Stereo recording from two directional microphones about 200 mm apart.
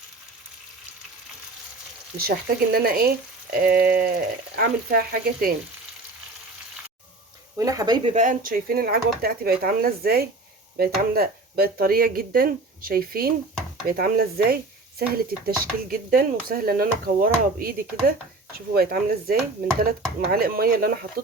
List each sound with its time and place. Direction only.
2.1 s speech: 50° right (ahead or behind)
7.6 s speech: 15° right (ahead or behind)
8.1 s speech: 40° right (ahead or behind)